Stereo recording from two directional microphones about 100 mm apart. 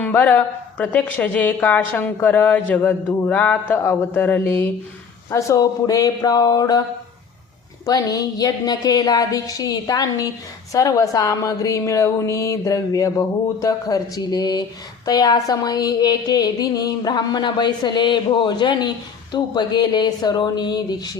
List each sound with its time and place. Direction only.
0.0 s a woman's voice: 15° left (ahead or behind)
5.3 s a woman's voice: 30° left (ahead or behind)
7.9 s a woman's voice: 40° left (ahead or behind)
15.0 s a sound: 40° left (ahead or behind)